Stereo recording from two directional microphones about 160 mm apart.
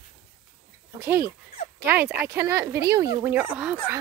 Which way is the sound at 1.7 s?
15° right (ahead or behind).